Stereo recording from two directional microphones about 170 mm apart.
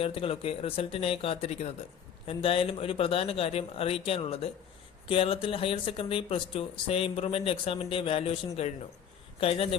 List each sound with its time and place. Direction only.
0.0 s speech: 35° left (ahead or behind)